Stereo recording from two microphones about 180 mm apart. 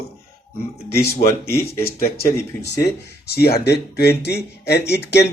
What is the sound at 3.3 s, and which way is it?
Speech, 60° left (ahead or behind).